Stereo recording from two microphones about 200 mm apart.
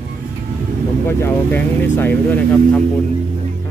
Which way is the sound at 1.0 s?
10° left (ahead or behind).